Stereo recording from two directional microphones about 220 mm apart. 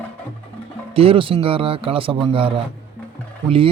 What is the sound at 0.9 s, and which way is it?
Speech, 25° right (ahead or behind).